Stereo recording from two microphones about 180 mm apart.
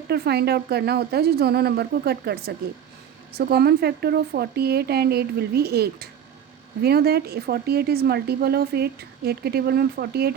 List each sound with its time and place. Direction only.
0.1 s a woman's voice: 65° right (ahead or behind)